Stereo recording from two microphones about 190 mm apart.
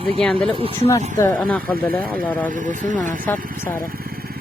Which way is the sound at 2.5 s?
40° right (ahead or behind).